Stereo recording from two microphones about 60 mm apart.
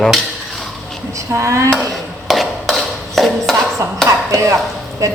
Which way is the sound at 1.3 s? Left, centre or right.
Right.